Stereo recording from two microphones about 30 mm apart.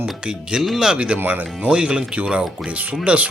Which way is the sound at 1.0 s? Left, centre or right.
Right.